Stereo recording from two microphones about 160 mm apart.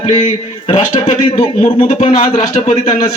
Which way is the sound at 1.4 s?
35° left (ahead or behind).